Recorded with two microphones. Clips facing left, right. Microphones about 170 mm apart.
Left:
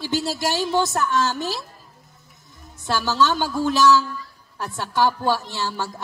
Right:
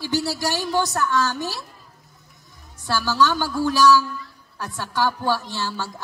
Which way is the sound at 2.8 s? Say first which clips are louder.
Even; 20° left (ahead or behind).